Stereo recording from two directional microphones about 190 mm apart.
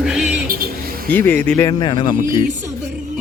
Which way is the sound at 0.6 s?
50° right (ahead or behind).